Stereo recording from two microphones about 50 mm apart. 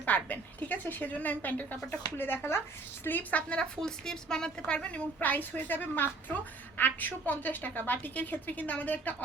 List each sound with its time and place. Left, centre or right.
0.0 s a woman's voice: left
2.1 s speech: left
3.0 s a woman's voice: left
3.6 s a woman's voice: centre
5.2 s a woman's voice: left